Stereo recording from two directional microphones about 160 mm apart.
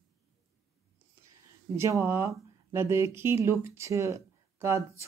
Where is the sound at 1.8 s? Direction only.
15° right (ahead or behind).